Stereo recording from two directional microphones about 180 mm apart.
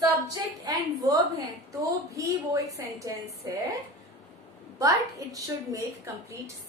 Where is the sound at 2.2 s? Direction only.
15° right (ahead or behind).